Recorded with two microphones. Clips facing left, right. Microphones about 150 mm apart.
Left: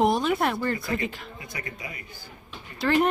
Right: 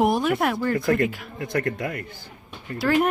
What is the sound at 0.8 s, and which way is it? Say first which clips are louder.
A man's voice: right 8 dB; 55° right (ahead or behind).